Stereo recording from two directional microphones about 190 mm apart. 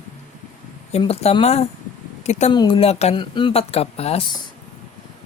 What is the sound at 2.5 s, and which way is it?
Speech, 25° left (ahead or behind).